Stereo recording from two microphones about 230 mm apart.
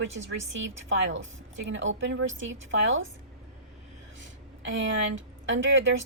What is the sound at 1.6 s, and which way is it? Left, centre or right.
A woman's voice, right.